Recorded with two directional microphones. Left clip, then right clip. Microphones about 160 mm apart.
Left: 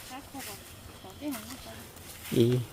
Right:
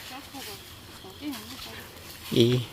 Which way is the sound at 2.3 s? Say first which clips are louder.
Right 3 dB; centre (ahead or behind).